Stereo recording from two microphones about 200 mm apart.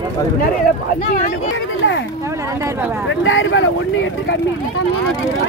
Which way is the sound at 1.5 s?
70° left (ahead or behind).